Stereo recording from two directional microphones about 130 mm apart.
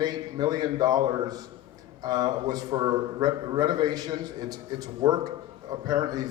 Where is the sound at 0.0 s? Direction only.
30° right (ahead or behind).